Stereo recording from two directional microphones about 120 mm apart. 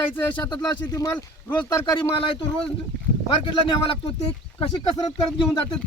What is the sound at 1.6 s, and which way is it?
Speech, 20° left (ahead or behind).